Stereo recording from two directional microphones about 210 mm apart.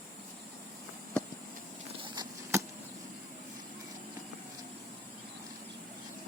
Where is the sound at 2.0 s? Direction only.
20° right (ahead or behind).